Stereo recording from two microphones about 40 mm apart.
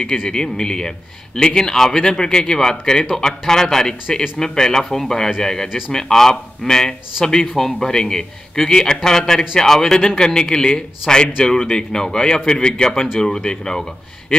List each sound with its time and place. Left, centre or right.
0.0 s a man's voice: centre